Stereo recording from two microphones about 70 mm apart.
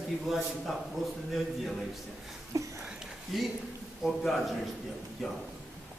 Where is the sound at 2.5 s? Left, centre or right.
Right.